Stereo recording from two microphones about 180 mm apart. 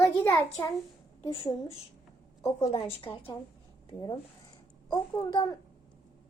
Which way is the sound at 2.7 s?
35° left (ahead or behind).